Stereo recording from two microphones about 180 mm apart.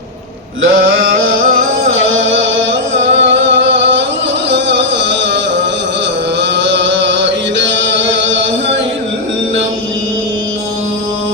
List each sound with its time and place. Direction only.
1.9 s music: 90° right
4.5 s a sound: 75° right (ahead or behind)
6.6 s chant: 80° right